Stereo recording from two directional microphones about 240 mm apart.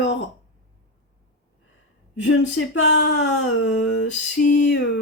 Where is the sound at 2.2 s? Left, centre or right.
Left.